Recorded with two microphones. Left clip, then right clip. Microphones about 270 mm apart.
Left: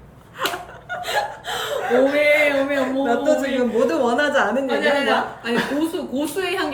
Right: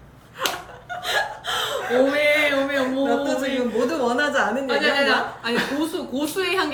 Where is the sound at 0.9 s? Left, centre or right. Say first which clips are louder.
Left 1 dB; centre.